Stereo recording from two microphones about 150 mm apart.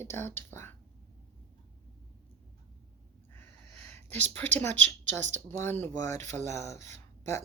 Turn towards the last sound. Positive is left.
turn(degrees=20)  # may be behind; listen again after turning